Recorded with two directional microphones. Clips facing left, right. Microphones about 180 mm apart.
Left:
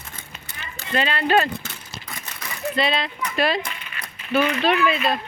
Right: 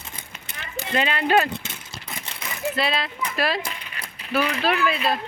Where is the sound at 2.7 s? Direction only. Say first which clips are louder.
Left 4 dB; centre (ahead or behind).